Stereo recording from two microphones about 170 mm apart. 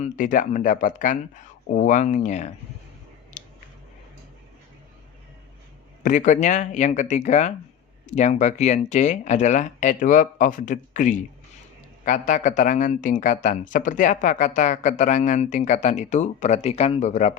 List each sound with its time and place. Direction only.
0.0 s a man's voice: 50° left (ahead or behind)
3.4 s a sound: 45° left (ahead or behind)
6.0 s a man's voice: 45° left (ahead or behind)